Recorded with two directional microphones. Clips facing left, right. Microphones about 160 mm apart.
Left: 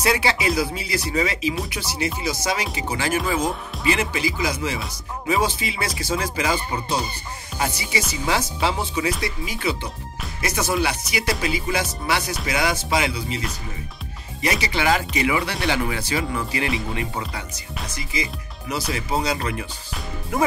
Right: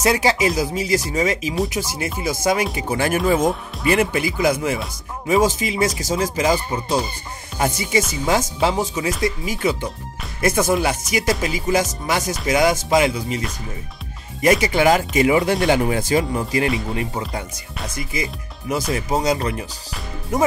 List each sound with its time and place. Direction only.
0.0 s speech: 45° right (ahead or behind)
14.4 s speech: 50° right (ahead or behind)
17.8 s speech: 50° right (ahead or behind)